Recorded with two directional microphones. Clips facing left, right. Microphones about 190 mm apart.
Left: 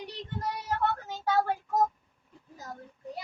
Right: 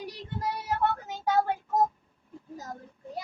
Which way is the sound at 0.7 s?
15° right (ahead or behind).